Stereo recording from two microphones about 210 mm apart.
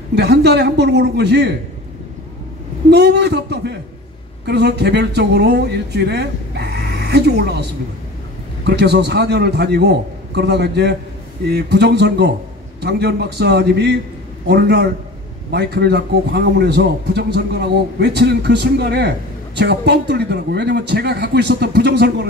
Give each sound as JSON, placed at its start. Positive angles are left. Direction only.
{"t": 0.1, "sound": "a man's voice", "side_deg": -50}
{"t": 2.9, "sound": "a man's voice", "side_deg": -55}
{"t": 8.6, "sound": "a man's voice", "side_deg": -50}